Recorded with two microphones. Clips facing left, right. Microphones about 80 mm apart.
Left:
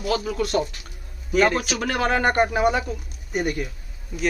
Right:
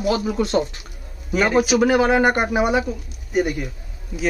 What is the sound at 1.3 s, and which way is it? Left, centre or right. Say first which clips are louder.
Speech: right 3 dB; centre.